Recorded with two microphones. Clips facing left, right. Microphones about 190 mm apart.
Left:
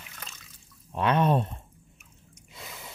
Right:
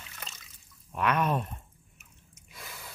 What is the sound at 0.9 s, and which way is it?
Speech, 30° left (ahead or behind).